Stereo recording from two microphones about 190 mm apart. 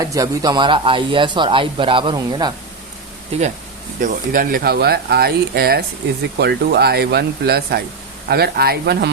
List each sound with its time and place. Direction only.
0.0 s speech: 20° right (ahead or behind)
4.0 s speech: 45° right (ahead or behind)